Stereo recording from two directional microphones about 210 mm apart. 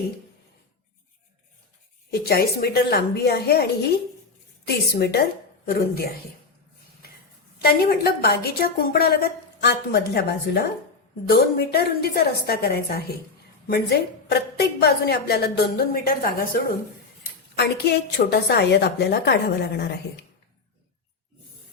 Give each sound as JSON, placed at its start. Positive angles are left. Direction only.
{"t": 2.1, "sound": "a woman's voice", "side_deg": 50}
{"t": 7.6, "sound": "a woman's voice", "side_deg": 50}
{"t": 17.6, "sound": "a woman's voice", "side_deg": 50}